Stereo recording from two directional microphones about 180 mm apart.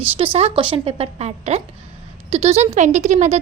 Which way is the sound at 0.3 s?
30° right (ahead or behind).